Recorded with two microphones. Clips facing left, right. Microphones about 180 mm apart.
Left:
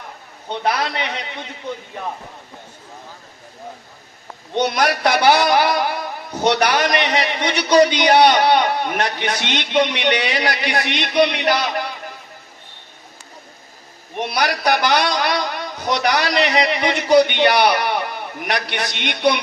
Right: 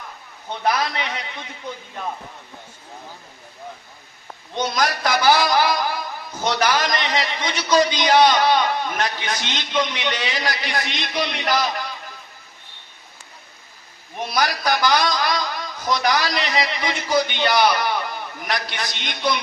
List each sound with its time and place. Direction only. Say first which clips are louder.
0.5 s a man's voice: left 1 dB; 65° left (ahead or behind)
4.5 s a man's voice: left 4 dB; 65° left (ahead or behind)
14.2 s a man's voice: left 2 dB; 70° left (ahead or behind)